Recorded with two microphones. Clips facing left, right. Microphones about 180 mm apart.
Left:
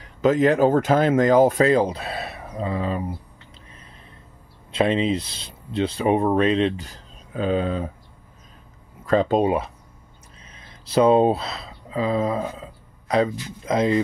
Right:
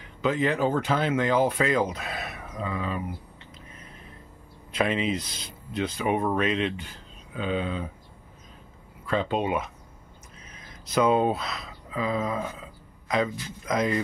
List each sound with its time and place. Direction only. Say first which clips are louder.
0.0 s speech: left 7 dB; 45° left (ahead or behind)
4.7 s speech: left 5 dB; 30° left (ahead or behind)
9.0 s speech: left 7 dB; 40° left (ahead or behind)